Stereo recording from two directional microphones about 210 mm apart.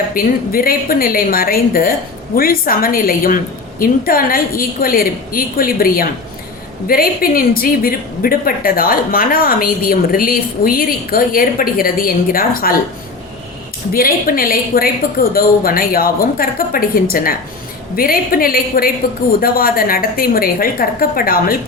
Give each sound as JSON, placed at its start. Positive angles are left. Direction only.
{"t": 0.1, "sound": "a woman's voice", "side_deg": 45}
{"t": 13.9, "sound": "a woman's voice", "side_deg": 45}